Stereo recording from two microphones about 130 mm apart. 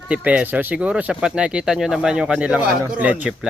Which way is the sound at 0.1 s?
10° right (ahead or behind).